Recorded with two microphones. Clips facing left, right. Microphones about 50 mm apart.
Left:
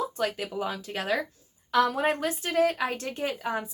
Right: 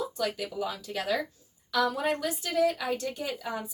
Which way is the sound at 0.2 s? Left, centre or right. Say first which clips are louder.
Left 2 dB; left.